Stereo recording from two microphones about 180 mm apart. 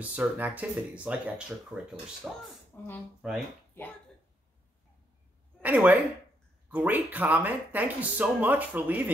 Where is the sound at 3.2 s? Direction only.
Centre (ahead or behind).